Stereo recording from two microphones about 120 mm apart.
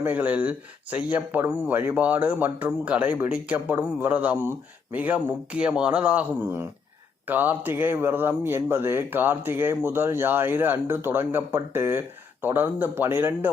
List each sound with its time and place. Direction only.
0.0 s speech: 15° right (ahead or behind)